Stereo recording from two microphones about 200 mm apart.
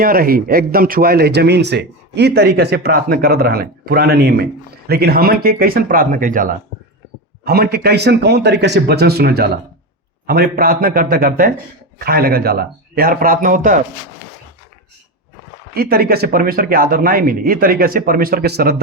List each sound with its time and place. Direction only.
0.0 s speech: 45° right (ahead or behind)
15.7 s speech: 50° right (ahead or behind)